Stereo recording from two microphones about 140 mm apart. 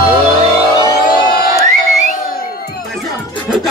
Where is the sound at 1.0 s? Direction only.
90° left.